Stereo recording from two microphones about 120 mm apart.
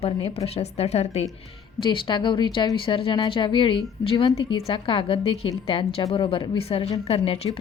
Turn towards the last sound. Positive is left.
turn(degrees=55)  # may be behind; listen again after turning